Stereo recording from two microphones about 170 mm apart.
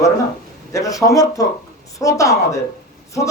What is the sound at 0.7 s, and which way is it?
Speech, 20° left (ahead or behind).